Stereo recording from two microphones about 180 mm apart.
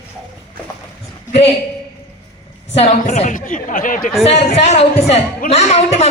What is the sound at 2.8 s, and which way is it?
A woman's voice, 40° left (ahead or behind).